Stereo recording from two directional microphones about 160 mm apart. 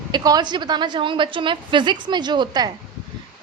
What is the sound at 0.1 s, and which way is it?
A woman's voice, 25° right (ahead or behind).